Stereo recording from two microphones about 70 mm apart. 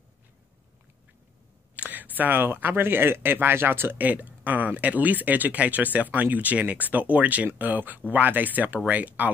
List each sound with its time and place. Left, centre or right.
1.8 s speech: right